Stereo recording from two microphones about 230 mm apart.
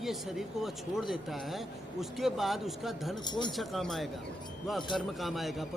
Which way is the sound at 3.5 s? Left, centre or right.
Centre.